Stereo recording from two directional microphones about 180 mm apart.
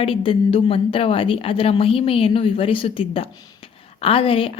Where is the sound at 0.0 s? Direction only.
30° left (ahead or behind).